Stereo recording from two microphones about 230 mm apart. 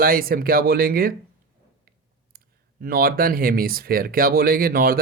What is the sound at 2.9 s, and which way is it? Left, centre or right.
Speech, right.